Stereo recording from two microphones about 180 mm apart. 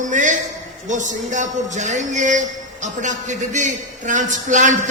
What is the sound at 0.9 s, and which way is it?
A man's voice, 45° right (ahead or behind).